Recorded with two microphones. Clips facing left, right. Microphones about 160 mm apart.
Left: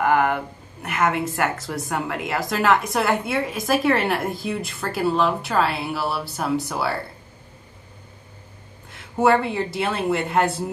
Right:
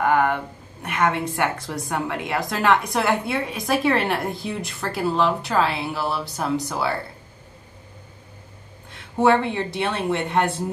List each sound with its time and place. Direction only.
0.0 s a woman's voice: 5° left (ahead or behind)
9.2 s speech: 5° left (ahead or behind)